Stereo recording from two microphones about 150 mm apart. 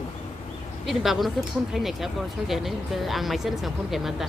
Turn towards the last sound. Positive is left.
turn(degrees=0)  # may be behind; listen again after turning